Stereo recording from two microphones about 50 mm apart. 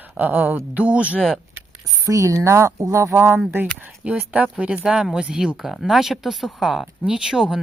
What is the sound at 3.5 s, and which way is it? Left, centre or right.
Speech, right.